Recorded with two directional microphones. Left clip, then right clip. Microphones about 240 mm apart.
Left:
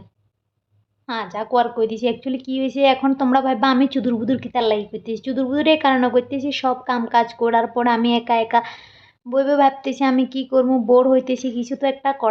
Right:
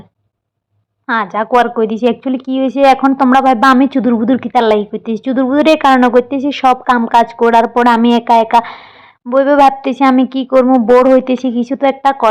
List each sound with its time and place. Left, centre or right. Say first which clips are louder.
1.0 s speech: right 11 dB; right